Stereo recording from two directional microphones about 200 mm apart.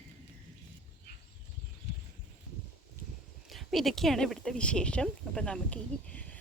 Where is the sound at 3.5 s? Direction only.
Centre (ahead or behind).